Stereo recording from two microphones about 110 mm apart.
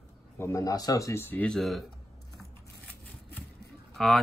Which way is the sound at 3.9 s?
5° left (ahead or behind).